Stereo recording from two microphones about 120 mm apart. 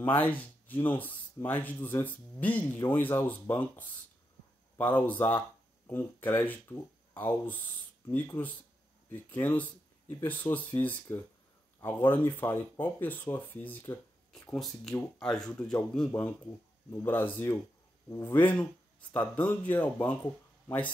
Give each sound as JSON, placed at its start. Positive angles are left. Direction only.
{"t": 0.0, "sound": "speech", "side_deg": 15}
{"t": 14.3, "sound": "speech", "side_deg": 5}
{"t": 16.9, "sound": "speech", "side_deg": 15}